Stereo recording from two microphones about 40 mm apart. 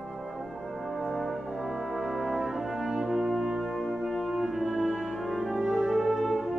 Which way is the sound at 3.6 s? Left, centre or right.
Centre.